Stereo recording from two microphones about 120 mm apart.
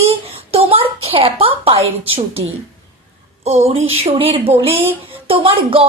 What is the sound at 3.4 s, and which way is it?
Speech, 60° right (ahead or behind).